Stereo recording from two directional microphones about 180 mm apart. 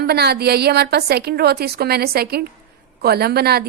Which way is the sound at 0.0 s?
65° right (ahead or behind).